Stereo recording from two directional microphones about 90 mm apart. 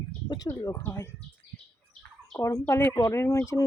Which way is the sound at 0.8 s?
25° left (ahead or behind).